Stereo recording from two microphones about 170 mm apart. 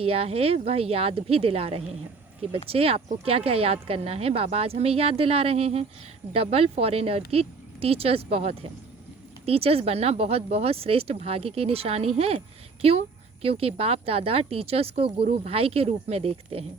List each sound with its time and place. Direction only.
0.0 s speech: 35° right (ahead or behind)